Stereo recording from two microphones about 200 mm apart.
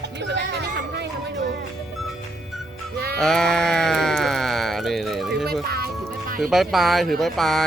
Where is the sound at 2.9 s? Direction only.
50° right (ahead or behind).